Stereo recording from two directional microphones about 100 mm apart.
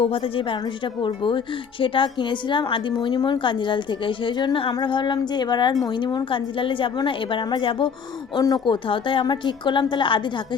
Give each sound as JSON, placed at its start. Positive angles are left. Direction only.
{"t": 0.0, "sound": "a woman's voice", "side_deg": 65}
{"t": 1.0, "sound": "a woman's voice", "side_deg": 55}
{"t": 8.4, "sound": "a woman's voice", "side_deg": 45}